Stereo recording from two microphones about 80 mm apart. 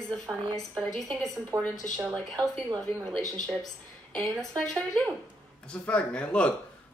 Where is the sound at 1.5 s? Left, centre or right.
Right.